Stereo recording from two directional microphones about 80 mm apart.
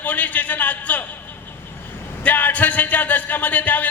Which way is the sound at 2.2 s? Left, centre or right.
Left.